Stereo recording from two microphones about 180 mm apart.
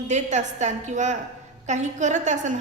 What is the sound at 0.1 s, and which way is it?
A woman's voice, 40° right (ahead or behind).